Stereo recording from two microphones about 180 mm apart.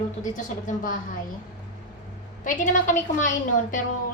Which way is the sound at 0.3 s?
45° left (ahead or behind).